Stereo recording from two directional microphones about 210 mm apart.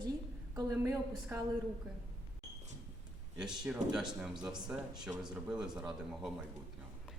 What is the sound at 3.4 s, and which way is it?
Speech, 5° right (ahead or behind).